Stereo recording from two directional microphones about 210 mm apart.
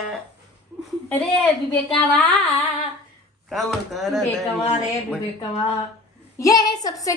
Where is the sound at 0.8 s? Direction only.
5° left (ahead or behind).